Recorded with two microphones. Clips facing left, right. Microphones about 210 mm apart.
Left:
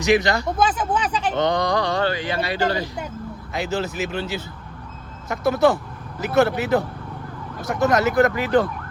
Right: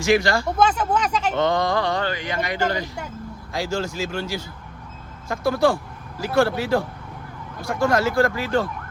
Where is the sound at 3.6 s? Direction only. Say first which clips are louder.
Left 1 dB; 20° left (ahead or behind).